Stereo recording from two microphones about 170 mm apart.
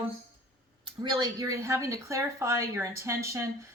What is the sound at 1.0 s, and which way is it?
A woman's voice, 25° right (ahead or behind).